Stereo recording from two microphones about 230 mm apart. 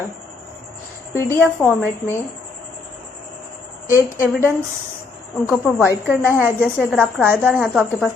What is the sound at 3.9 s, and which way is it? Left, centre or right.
Speech, centre.